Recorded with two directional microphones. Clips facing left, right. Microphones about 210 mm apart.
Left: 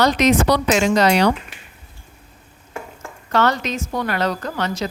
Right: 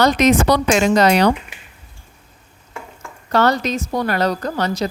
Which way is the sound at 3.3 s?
35° right (ahead or behind).